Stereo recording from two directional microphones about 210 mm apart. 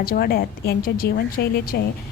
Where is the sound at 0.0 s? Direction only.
45° left (ahead or behind).